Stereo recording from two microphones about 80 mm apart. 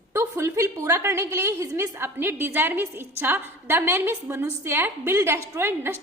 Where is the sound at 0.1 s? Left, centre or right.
Right.